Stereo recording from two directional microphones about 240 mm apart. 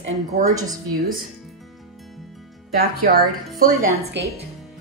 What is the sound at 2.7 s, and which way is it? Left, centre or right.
A woman's voice, right.